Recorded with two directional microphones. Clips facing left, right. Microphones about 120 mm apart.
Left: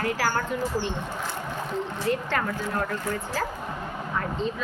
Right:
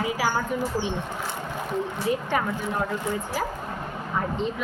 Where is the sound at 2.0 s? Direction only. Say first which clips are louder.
Even; 10° right (ahead or behind).